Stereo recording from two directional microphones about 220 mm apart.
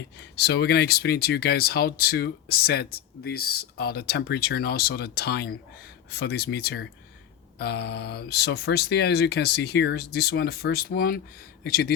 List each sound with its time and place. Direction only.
0.3 s speech: 50° left (ahead or behind)